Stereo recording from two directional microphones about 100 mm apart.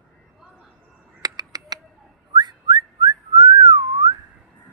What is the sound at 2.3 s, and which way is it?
Whistling, 45° right (ahead or behind).